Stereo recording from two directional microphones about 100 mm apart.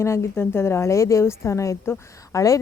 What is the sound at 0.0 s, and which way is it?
A woman's voice, 25° left (ahead or behind).